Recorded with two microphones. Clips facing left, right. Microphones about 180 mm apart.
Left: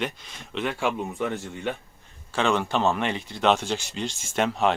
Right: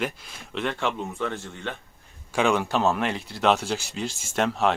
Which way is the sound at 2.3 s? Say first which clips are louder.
Right 1 dB; 10° right (ahead or behind).